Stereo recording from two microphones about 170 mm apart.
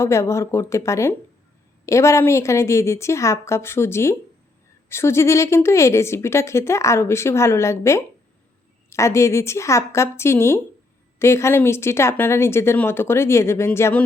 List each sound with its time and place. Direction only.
0.0 s a woman's voice: 15° left (ahead or behind)